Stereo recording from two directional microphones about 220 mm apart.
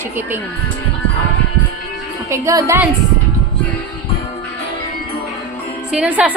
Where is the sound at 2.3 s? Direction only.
15° right (ahead or behind).